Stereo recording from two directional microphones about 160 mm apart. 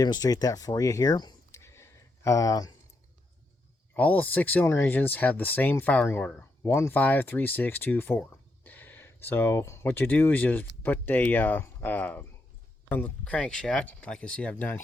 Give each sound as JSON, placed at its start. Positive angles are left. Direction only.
{"t": 0.0, "sound": "speech", "side_deg": 25}
{"t": 3.9, "sound": "speech", "side_deg": 10}